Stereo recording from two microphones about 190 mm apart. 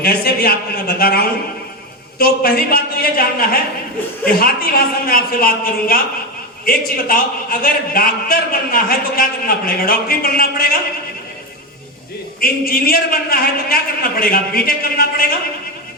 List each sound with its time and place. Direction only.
0.0 s a man's voice: 55° left (ahead or behind)
12.4 s a man's voice: 50° left (ahead or behind)